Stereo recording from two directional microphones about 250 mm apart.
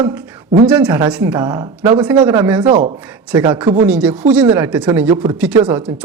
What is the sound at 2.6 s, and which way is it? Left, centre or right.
Speech, right.